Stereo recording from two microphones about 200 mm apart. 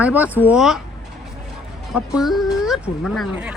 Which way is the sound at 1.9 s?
5° right (ahead or behind).